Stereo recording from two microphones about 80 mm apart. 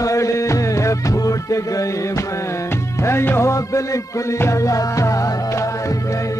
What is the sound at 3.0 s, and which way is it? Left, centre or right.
Music, left.